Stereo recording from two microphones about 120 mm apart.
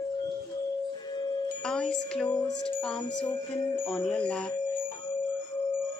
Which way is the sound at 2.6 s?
5° left (ahead or behind).